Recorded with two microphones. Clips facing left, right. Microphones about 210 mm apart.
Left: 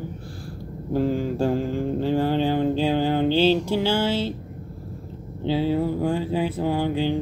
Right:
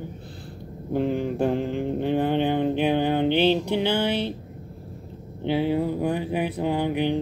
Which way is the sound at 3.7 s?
20° right (ahead or behind).